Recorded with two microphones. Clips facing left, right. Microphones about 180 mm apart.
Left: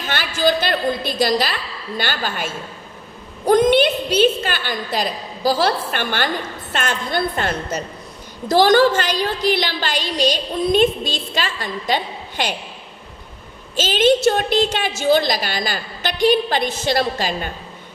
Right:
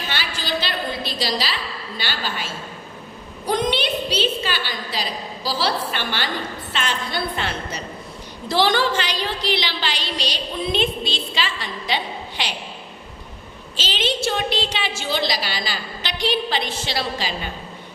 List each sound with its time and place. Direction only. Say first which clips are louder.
0.1 s a sound: left 10 dB; 50° left (ahead or behind)
2.0 s a woman's voice: left 5 dB; 50° left (ahead or behind)
13.7 s a woman's voice: left 10 dB; 50° left (ahead or behind)